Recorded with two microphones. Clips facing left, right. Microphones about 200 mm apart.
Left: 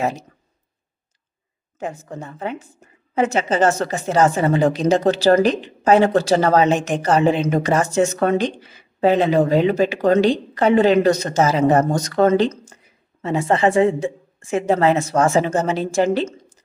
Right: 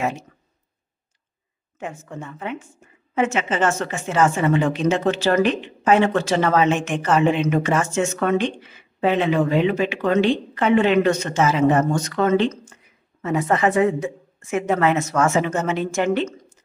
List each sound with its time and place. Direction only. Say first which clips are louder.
0.0 s a woman's voice: left 2 dB; 35° left (ahead or behind)
1.8 s a woman's voice: left 3 dB; 35° left (ahead or behind)